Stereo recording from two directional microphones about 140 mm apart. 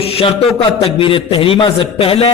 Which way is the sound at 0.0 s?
45° left (ahead or behind).